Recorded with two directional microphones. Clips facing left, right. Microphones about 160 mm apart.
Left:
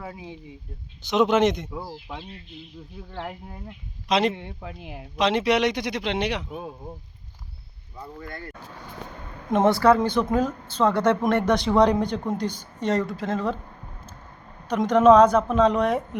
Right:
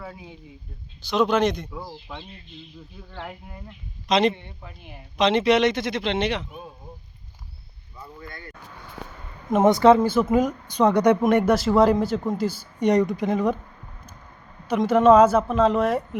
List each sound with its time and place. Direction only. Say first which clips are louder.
0.0 s a man's voice: left 2 dB; 20° left (ahead or behind)
4.4 s speech: left 6 dB; 90° left
5.1 s speech: right 3 dB; 10° left (ahead or behind)
9.6 s speech: right 3 dB; 20° right (ahead or behind)
10.0 s speech: right 2 dB; 5° right (ahead or behind)
11.5 s speech: right 1 dB; 5° right (ahead or behind)
14.7 s speech: even; 5° right (ahead or behind)